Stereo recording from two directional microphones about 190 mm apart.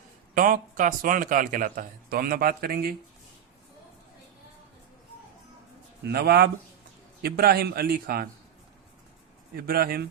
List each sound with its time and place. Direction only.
0.3 s a man's voice: 45° right (ahead or behind)
6.1 s a man's voice: 60° right (ahead or behind)
9.6 s a man's voice: 55° right (ahead or behind)